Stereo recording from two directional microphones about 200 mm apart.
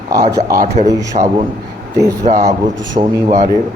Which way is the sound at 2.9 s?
15° right (ahead or behind).